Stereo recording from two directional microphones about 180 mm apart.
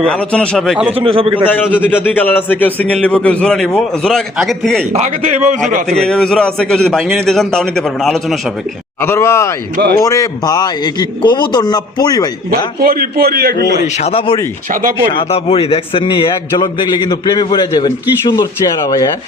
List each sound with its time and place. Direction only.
0.0 s a man's voice: 5° left (ahead or behind)
0.9 s a man's voice: 30° right (ahead or behind)
1.5 s a man's voice: 10° left (ahead or behind)
4.9 s a man's voice: 40° right (ahead or behind)
5.9 s a man's voice: 5° left (ahead or behind)
9.0 s a man's voice: 15° left (ahead or behind)
9.7 s a man's voice: 60° right (ahead or behind)
10.0 s a man's voice: 20° left (ahead or behind)
12.5 s a man's voice: 55° right (ahead or behind)
13.8 s speech: 40° left (ahead or behind)
14.7 s speech: 45° right (ahead or behind)
15.1 s a man's voice: 30° left (ahead or behind)